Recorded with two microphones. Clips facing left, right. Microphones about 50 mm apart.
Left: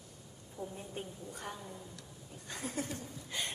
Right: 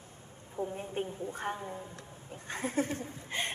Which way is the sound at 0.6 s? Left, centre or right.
Right.